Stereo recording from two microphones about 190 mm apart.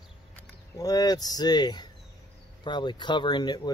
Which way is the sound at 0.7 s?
20° left (ahead or behind).